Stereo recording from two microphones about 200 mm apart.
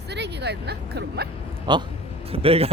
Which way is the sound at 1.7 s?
20° right (ahead or behind).